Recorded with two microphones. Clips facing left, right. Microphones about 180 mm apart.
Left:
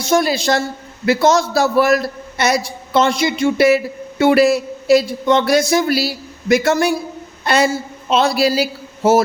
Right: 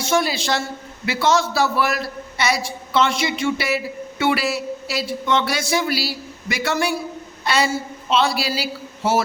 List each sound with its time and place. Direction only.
0.0 s a man's voice: 40° left (ahead or behind)